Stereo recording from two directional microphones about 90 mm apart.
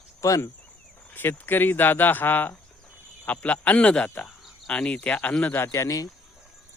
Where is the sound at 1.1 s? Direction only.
25° left (ahead or behind).